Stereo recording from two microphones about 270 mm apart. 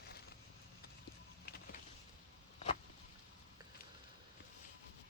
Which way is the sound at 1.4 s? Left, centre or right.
Left.